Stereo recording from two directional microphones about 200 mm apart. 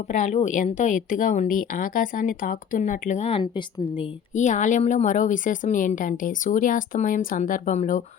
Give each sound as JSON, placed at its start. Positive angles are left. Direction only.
{"t": 0.1, "sound": "a woman's voice", "side_deg": 35}